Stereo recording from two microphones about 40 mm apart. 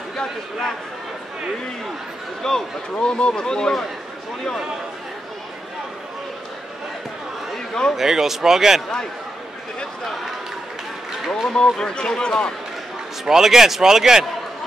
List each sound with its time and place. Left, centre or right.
0.1 s speech: centre
2.4 s speech: centre
3.0 s speech: left
7.5 s a sound: centre
7.9 s speech: centre
11.2 s speech: centre
11.5 s speech: left
13.2 s speech: centre